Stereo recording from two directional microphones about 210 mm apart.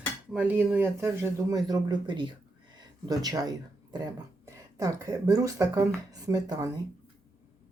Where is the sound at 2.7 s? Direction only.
20° right (ahead or behind).